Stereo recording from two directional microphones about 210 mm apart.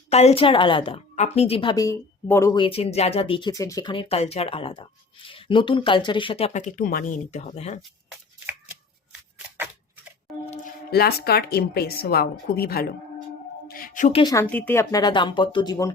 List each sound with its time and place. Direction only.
0.1 s a woman's voice: 30° left (ahead or behind)
10.9 s a woman's voice: 50° left (ahead or behind)
13.7 s music: 45° left (ahead or behind)
14.2 s a woman's voice: 20° left (ahead or behind)
14.5 s a woman's voice: 10° left (ahead or behind)